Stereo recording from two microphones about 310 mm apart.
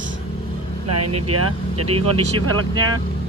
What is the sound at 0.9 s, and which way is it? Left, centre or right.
Speech, right.